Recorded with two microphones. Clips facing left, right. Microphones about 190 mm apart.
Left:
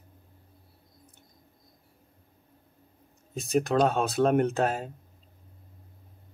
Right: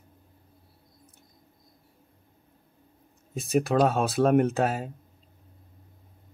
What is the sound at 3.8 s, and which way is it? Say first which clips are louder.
Speech: right 1 dB; 5° right (ahead or behind).